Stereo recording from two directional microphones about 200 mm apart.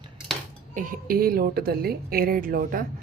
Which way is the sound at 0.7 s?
40° right (ahead or behind).